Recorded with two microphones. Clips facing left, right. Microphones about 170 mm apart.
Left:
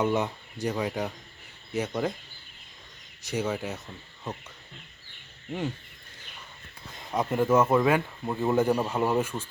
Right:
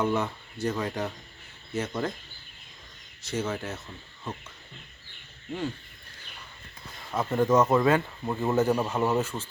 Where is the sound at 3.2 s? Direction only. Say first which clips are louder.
Left 1 dB; 15° left (ahead or behind).